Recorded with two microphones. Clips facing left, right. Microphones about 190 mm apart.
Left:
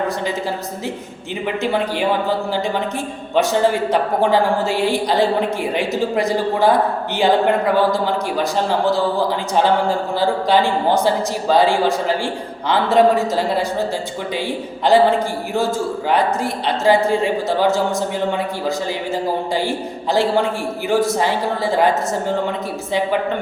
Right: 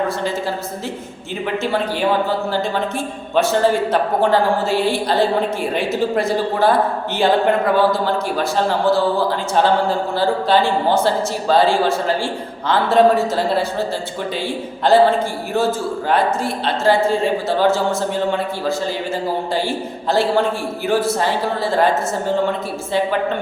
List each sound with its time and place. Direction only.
1.6 s a woman's voice: 15° left (ahead or behind)
3.3 s a woman's voice: 15° left (ahead or behind)
10.2 s a woman's voice: 15° left (ahead or behind)
20.1 s a woman's voice: 15° left (ahead or behind)